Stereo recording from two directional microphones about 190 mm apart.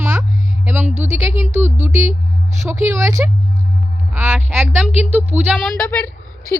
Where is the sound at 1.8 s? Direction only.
10° right (ahead or behind).